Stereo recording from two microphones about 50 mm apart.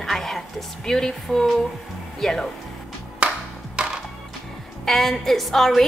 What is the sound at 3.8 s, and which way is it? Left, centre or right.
Music, centre.